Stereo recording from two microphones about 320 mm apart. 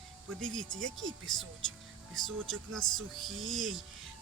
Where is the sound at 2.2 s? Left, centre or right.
Centre.